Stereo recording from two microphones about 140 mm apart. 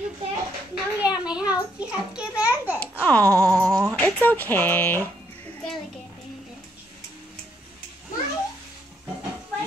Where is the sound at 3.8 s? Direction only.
10° left (ahead or behind).